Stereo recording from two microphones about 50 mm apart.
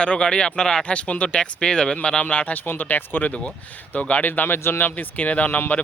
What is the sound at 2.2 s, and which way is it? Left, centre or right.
Speech, left.